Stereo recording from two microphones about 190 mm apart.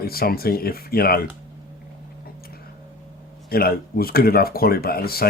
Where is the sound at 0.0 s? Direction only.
55° left (ahead or behind).